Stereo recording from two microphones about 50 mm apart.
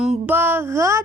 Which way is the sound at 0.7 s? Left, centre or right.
Right.